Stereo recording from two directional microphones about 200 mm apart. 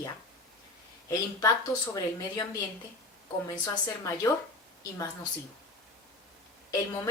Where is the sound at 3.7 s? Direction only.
15° left (ahead or behind).